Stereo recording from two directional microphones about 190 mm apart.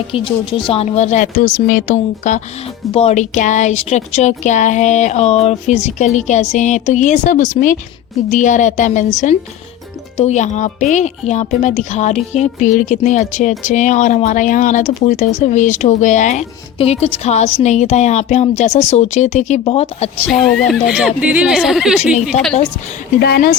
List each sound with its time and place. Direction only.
0.1 s speech: 25° left (ahead or behind)
20.3 s speech: centre (ahead or behind)
23.2 s speech: 55° left (ahead or behind)